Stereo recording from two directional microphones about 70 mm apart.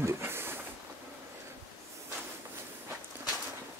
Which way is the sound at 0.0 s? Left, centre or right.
Right.